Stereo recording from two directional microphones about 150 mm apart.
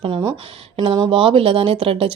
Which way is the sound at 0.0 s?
30° right (ahead or behind).